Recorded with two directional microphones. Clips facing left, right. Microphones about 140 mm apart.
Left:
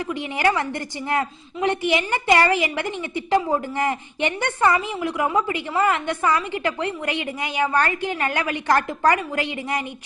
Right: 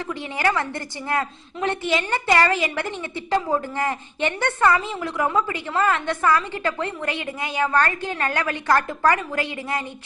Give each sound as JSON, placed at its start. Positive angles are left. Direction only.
{"t": 0.1, "sound": "a woman's voice", "side_deg": 15}